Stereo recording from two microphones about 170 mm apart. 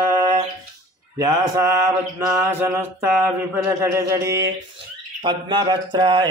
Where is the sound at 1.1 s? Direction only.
20° right (ahead or behind).